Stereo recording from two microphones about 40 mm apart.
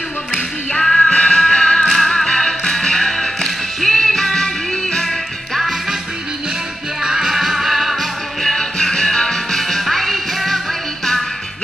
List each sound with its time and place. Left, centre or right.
0.3 s music: centre
5.6 s music: centre
7.0 s music: centre
8.4 s music: centre